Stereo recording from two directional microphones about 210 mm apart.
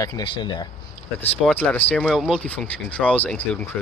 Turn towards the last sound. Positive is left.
turn(degrees=10)  # may be behind; listen again after turning